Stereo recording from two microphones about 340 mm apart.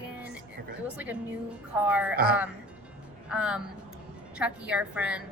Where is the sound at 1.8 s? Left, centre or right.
Centre.